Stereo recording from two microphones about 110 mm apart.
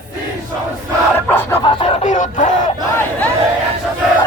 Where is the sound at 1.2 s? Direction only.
20° left (ahead or behind).